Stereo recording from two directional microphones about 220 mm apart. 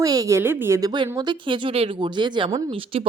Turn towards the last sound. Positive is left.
turn(degrees=-25)  # may be behind; listen again after turning